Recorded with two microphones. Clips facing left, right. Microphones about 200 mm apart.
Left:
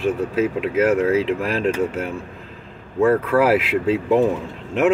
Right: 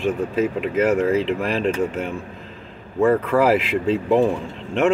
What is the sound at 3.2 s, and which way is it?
Speech, 5° left (ahead or behind).